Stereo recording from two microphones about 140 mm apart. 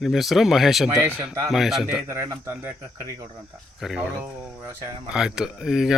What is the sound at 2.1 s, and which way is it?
Speech, 20° right (ahead or behind).